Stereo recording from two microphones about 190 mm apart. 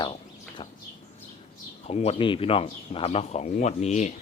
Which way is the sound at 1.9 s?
35° left (ahead or behind).